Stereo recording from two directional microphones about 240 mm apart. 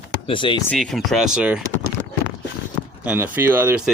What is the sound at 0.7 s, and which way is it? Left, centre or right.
Speech, centre.